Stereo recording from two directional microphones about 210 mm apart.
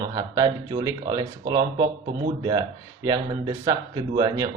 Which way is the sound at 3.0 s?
20° right (ahead or behind).